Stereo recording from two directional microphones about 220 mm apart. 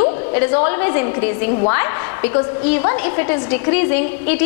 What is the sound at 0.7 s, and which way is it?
A woman's voice, 15° left (ahead or behind).